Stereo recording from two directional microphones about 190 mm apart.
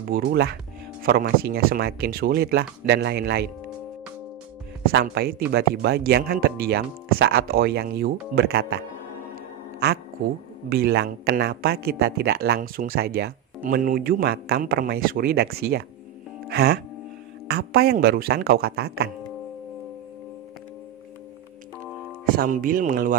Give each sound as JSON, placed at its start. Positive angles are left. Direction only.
{"t": 0.1, "sound": "speech", "side_deg": -55}
{"t": 4.8, "sound": "speech", "side_deg": -55}
{"t": 9.3, "sound": "music", "side_deg": -60}
{"t": 10.7, "sound": "a man's voice", "side_deg": -60}
{"t": 16.4, "sound": "music", "side_deg": -60}
{"t": 17.5, "sound": "speech", "side_deg": -55}
{"t": 22.2, "sound": "speech", "side_deg": -50}